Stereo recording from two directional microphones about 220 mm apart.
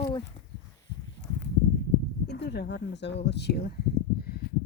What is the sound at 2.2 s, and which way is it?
A woman's voice, 50° left (ahead or behind).